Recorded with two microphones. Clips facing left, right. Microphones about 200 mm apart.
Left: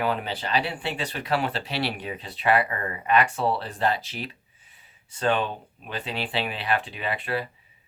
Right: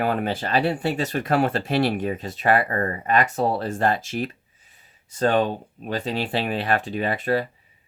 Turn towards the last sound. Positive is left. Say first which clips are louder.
# right 6 dB
turn(degrees=-40)  # may be behind; listen again after turning